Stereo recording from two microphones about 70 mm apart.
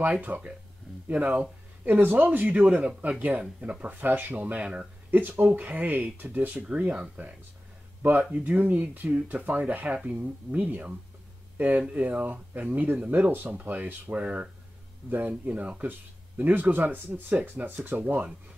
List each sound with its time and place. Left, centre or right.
0.0 s speech: right